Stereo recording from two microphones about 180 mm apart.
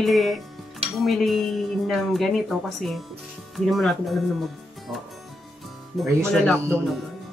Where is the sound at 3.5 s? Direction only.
Centre (ahead or behind).